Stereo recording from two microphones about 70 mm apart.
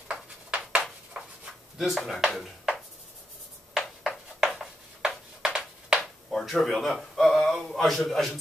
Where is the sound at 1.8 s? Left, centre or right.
Centre.